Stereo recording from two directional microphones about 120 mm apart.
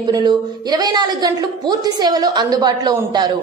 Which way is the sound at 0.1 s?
35° right (ahead or behind).